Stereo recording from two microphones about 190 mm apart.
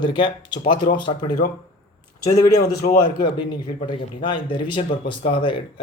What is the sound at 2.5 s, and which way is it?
Speech, 60° left (ahead or behind).